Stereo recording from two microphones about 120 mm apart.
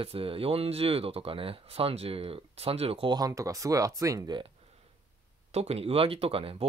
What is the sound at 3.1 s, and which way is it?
Speech, 30° right (ahead or behind).